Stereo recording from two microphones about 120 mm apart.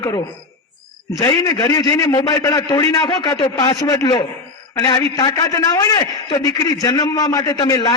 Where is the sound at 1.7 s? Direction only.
35° left (ahead or behind).